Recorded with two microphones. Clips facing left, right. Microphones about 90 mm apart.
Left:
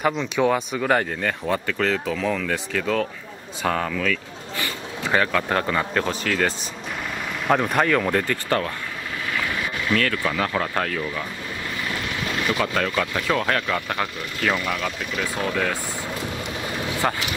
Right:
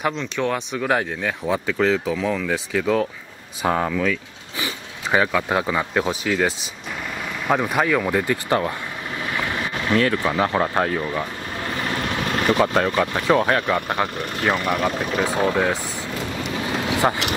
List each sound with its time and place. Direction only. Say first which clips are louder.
0.1 s speech: left 3 dB; 10° left (ahead or behind); by 3.0 s 5° right (ahead or behind)
3.6 s speech: right 3 dB; 20° right (ahead or behind)
9.2 s boat: right 1 dB; 25° right (ahead or behind)
10.0 s speech: right 4 dB; 25° right (ahead or behind)
11.7 s speech: right 5 dB; 40° right (ahead or behind); by 14.0 s 20° right (ahead or behind)
14.5 s speech: right 5 dB; 45° right (ahead or behind)
17.0 s speech: right 3 dB; 25° right (ahead or behind)